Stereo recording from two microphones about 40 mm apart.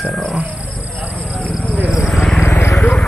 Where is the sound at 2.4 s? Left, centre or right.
Left.